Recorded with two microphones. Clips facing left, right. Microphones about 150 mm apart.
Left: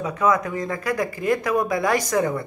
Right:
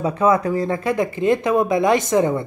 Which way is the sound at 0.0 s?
30° right (ahead or behind).